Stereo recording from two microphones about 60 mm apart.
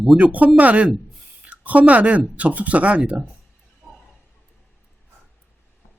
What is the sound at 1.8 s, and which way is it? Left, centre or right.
A woman's voice, right.